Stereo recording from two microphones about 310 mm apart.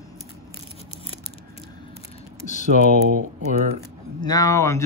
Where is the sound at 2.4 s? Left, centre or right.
Left.